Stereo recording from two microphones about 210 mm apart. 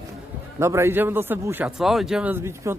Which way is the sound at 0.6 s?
10° right (ahead or behind).